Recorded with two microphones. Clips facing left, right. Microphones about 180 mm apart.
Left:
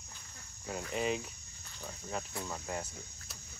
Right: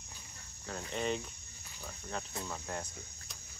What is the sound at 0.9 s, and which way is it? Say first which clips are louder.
Speech: left 1 dB; 5° left (ahead or behind).